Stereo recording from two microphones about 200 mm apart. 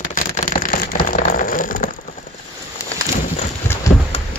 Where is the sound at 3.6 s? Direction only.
10° left (ahead or behind).